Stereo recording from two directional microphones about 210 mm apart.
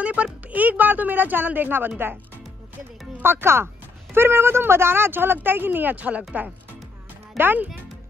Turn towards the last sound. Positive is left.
turn(degrees=-10)  # may be behind; listen again after turning